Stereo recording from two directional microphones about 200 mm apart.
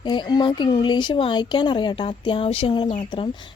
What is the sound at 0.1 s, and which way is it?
Speech, 20° left (ahead or behind).